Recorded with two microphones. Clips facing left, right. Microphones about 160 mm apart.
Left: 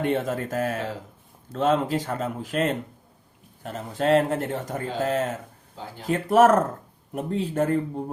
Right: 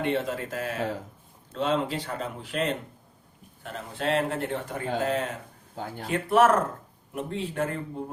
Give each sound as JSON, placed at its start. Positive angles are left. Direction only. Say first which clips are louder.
{"t": 0.0, "sound": "a man's voice", "louder": "left 3 dB", "side_deg": 50}